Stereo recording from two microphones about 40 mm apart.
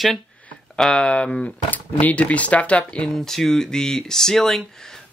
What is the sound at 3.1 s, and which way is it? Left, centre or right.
Speech, centre.